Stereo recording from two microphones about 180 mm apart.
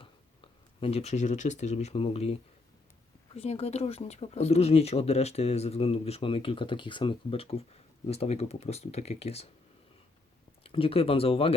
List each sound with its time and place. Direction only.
0.0 s speech: 30° left (ahead or behind)
10.6 s speech: 30° left (ahead or behind)